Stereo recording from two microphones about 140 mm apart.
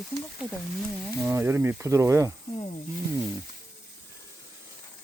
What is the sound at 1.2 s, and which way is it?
Speech, 20° right (ahead or behind).